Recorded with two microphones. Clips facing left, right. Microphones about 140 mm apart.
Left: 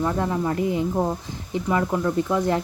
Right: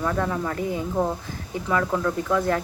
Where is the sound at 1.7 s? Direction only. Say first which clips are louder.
Left 1 dB; 20° left (ahead or behind).